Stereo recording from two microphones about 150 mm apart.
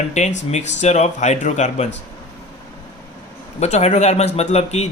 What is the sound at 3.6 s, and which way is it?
Speech, 50° left (ahead or behind).